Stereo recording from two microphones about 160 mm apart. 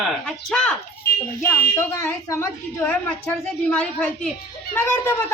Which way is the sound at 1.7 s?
15° left (ahead or behind).